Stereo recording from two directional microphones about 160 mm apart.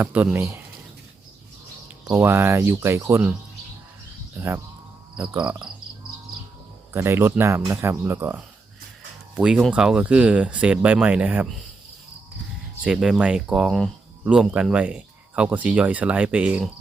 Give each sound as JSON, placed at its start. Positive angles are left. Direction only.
{"t": 0.0, "sound": "speech", "side_deg": -10}
{"t": 2.0, "sound": "speech", "side_deg": -15}
{"t": 4.4, "sound": "speech", "side_deg": -15}
{"t": 6.9, "sound": "speech", "side_deg": -15}
{"t": 12.8, "sound": "speech", "side_deg": -5}